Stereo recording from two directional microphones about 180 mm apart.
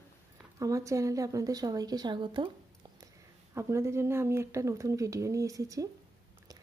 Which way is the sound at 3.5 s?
15° right (ahead or behind).